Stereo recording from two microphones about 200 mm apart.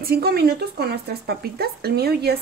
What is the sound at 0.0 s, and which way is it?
Speech, 50° right (ahead or behind).